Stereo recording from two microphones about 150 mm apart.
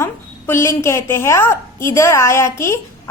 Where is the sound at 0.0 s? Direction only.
15° left (ahead or behind).